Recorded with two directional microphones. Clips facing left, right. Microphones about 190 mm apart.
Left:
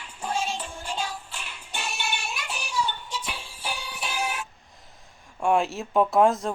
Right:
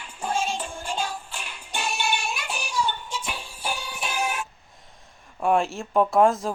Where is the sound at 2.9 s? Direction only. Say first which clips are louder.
Right 2 dB; 50° right (ahead or behind).